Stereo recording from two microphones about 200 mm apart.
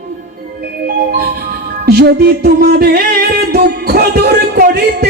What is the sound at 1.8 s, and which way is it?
Music, 50° right (ahead or behind).